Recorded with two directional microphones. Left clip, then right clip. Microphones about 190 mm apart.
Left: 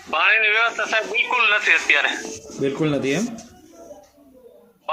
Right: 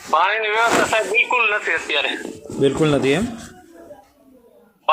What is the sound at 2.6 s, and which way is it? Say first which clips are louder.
Speech: right 5 dB; 10° right (ahead or behind).